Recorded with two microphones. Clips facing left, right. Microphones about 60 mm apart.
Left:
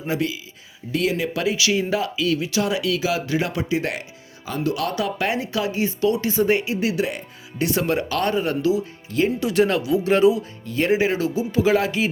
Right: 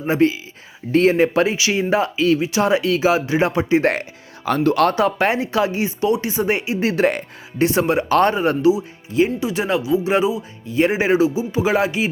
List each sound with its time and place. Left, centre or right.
0.0 s speech: right
4.4 s speech: right
4.9 s speech: right
6.8 s speech: right
7.6 s speech: right
8.7 s speech: centre
10.8 s speech: right